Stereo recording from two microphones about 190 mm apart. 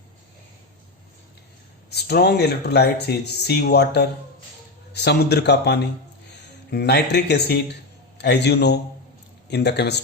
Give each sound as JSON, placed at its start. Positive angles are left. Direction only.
{"t": 1.9, "sound": "a man's voice", "side_deg": 60}